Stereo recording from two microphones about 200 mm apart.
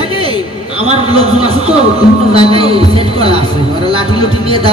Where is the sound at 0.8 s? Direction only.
30° right (ahead or behind).